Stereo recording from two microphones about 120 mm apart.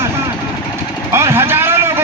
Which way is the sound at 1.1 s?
20° right (ahead or behind).